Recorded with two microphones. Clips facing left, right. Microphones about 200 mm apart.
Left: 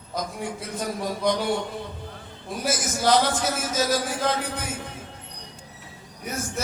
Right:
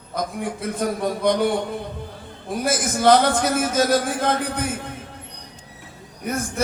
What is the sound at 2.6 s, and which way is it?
A man's voice, 55° right (ahead or behind).